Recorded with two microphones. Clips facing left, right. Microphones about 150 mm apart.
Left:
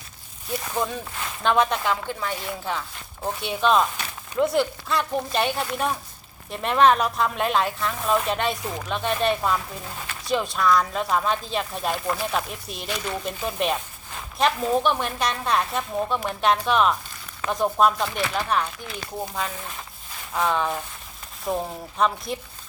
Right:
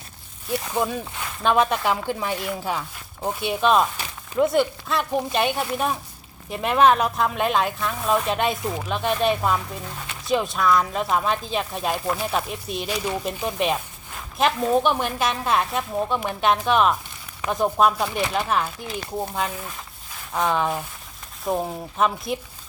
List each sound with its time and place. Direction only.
0.7 s speech: 10° right (ahead or behind)
18.1 s speech: 20° right (ahead or behind)
18.4 s speech: 5° right (ahead or behind)
20.3 s speech: centre (ahead or behind)